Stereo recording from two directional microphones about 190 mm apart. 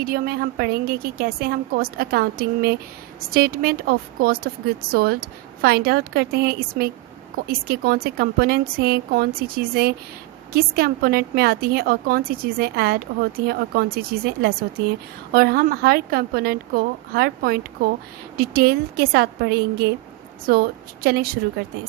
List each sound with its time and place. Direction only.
0.0 s a woman's voice: 50° right (ahead or behind)